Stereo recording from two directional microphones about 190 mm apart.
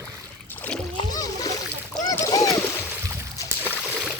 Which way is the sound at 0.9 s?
20° left (ahead or behind).